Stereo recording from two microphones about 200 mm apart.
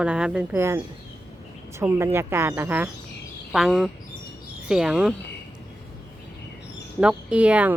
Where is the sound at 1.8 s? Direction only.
10° right (ahead or behind).